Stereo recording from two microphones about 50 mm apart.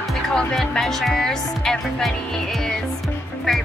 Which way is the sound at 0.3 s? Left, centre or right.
Centre.